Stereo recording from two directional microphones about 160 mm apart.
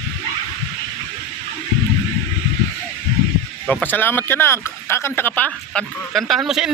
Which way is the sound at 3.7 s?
10° left (ahead or behind).